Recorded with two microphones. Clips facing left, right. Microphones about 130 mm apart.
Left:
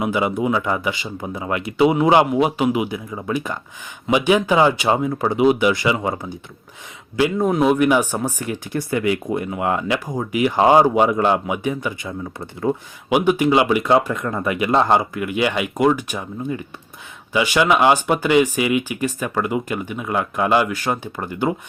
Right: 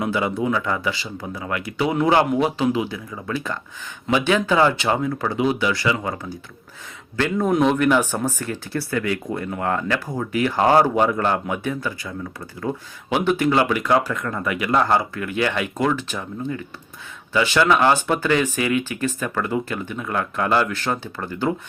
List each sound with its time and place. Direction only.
0.0 s speech: 15° left (ahead or behind)
7.2 s speech: 10° left (ahead or behind)